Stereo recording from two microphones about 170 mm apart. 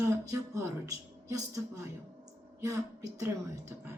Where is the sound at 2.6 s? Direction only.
20° right (ahead or behind).